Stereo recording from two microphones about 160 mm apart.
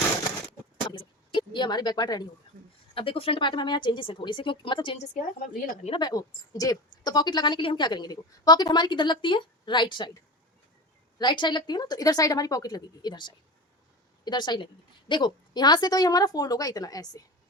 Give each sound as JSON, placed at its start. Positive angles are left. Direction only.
{"t": 0.9, "sound": "a sound", "side_deg": 30}
{"t": 2.9, "sound": "a woman's voice", "side_deg": 35}
{"t": 11.2, "sound": "a woman's voice", "side_deg": 30}